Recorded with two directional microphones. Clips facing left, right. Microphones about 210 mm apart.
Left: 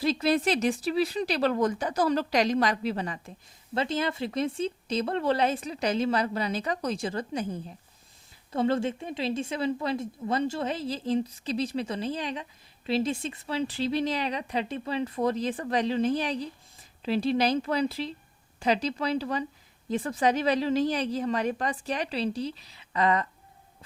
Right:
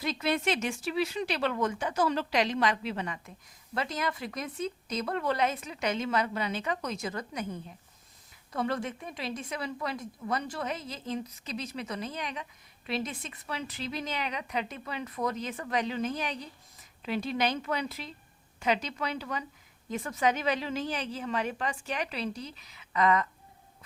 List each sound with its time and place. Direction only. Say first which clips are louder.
0.0 s a woman's voice: left 5 dB; 35° left (ahead or behind)